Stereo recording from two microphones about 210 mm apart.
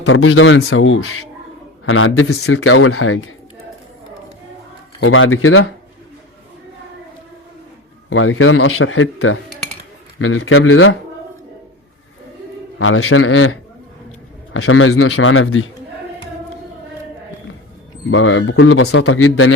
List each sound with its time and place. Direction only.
0.0 s a man's voice: 85° left
4.9 s a man's voice: 80° left
8.1 s a man's voice: 75° left (ahead or behind)
12.8 s a man's voice: 85° left
18.1 s a man's voice: 75° left (ahead or behind)